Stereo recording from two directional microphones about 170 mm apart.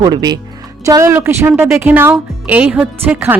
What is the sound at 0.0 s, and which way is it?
Speech, 25° right (ahead or behind).